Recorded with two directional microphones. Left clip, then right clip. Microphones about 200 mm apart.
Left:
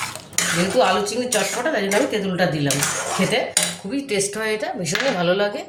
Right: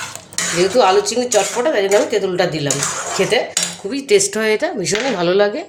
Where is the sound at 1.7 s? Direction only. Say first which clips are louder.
Right 6 dB; 55° right (ahead or behind); by 5.5 s 40° right (ahead or behind).